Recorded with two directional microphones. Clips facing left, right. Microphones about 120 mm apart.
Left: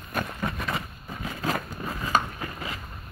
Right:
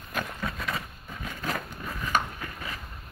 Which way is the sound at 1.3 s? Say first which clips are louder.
Left 4 dB; 35° left (ahead or behind).